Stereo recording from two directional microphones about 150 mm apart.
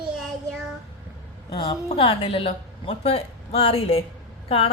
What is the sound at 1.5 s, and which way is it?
A woman's voice, 40° left (ahead or behind).